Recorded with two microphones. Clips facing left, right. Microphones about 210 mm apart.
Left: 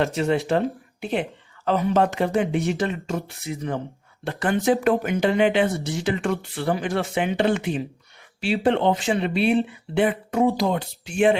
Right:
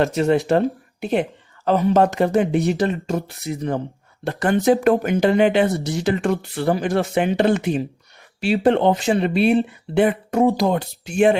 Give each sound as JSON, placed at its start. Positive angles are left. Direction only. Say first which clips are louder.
{"t": 0.0, "sound": "speech", "louder": "right 4 dB", "side_deg": -40}
{"t": 1.6, "sound": "speech", "louder": "right 4 dB", "side_deg": -40}